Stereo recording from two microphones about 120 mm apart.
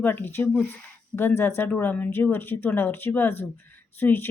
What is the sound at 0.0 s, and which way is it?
Speech, 15° left (ahead or behind).